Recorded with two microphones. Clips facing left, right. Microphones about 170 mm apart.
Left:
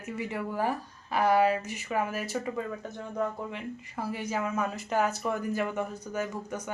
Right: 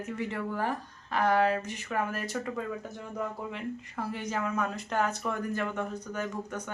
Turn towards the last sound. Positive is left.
turn(degrees=5)  # may be behind; listen again after turning